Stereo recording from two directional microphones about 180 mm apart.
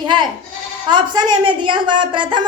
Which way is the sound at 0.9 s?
25° right (ahead or behind).